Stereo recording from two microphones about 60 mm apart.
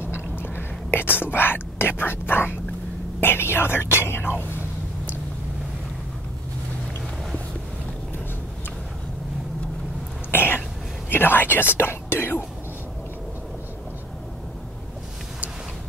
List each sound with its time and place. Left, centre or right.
0.0 s chewing: left
0.9 s speech: left
4.6 s a sound: right
10.3 s cough: left
11.1 s speech: left